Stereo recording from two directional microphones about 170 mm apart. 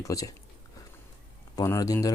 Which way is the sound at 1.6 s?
20° left (ahead or behind).